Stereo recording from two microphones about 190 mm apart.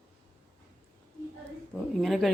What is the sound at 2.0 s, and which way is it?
Speech, centre (ahead or behind).